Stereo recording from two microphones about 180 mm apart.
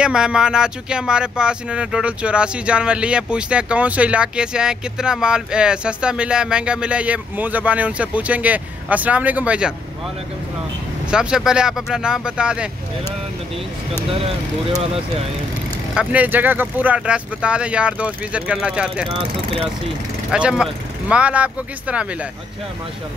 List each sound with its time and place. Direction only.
0.0 s speech: 5° right (ahead or behind)
11.1 s speech: 5° right (ahead or behind)
15.9 s speech: 5° right (ahead or behind)
19.0 s speech: 30° right (ahead or behind)
20.2 s speech: 5° right (ahead or behind)